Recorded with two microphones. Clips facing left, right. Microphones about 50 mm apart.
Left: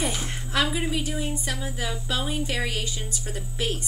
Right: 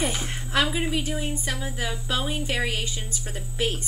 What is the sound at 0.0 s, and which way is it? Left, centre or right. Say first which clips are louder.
A woman's voice: right 1 dB; centre.